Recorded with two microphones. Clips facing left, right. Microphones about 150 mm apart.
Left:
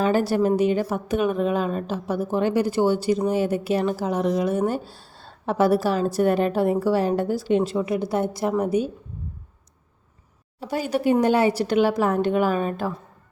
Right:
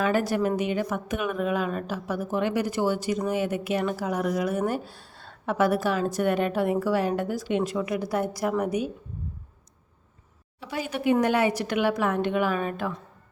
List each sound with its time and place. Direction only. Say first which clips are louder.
0.0 s a woman's voice: left 4 dB; 30° left (ahead or behind)
10.6 s a woman's voice: left 6 dB; 40° left (ahead or behind)